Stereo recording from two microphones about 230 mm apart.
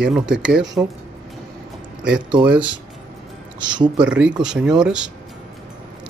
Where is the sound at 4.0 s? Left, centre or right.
Centre.